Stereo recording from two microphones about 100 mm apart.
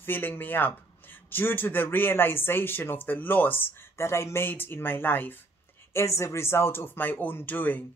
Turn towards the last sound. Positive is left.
turn(degrees=15)  # may be behind; listen again after turning